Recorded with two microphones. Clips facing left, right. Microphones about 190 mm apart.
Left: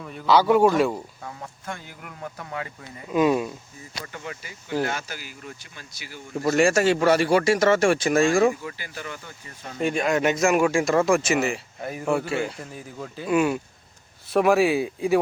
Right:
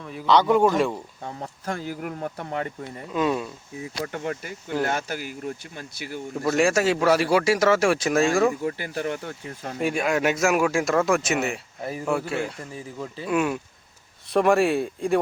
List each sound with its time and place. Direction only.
0.0 s speech: centre (ahead or behind)
1.2 s speech: 35° right (ahead or behind)
2.2 s speech: 30° right (ahead or behind)
3.1 s speech: 10° left (ahead or behind)
4.0 s speech: 55° right (ahead or behind)
6.3 s speech: centre (ahead or behind)
8.6 s speech: 50° right (ahead or behind)
9.7 s speech: 5° right (ahead or behind)